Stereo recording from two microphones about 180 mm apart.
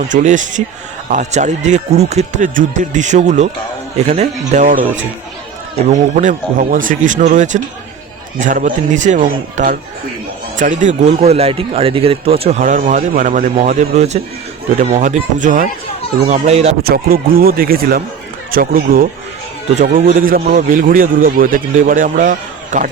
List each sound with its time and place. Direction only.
0.1 s a man's voice: 45° right (ahead or behind)
5.9 s a man's voice: 45° right (ahead or behind)
16.8 s a man's voice: 55° right (ahead or behind)